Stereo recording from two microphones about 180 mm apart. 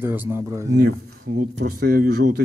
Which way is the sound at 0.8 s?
55° right (ahead or behind).